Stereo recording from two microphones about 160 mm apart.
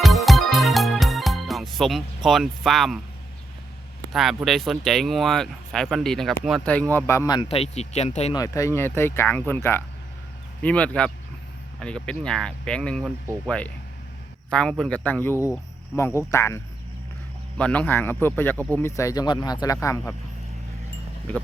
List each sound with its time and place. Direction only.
0.0 s music: centre (ahead or behind)
4.1 s speech: centre (ahead or behind); by 7.4 s 20° left (ahead or behind)
7.4 s speech: 40° left (ahead or behind)
8.3 s speech: 20° left (ahead or behind)
14.5 s speech: 5° left (ahead or behind)
17.6 s speech: 10° left (ahead or behind)